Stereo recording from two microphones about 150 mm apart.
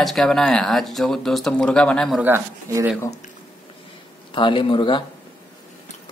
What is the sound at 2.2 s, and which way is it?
Speech, 15° right (ahead or behind).